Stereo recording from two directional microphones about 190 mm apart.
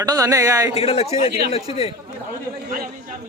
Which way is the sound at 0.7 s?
30° left (ahead or behind).